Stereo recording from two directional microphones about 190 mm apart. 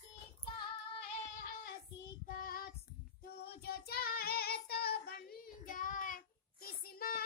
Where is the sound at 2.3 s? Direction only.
50° left (ahead or behind).